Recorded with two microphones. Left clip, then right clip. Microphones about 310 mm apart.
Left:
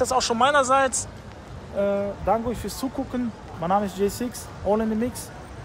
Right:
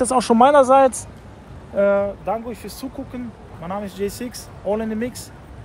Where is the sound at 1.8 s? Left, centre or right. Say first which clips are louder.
Right 7 dB; right.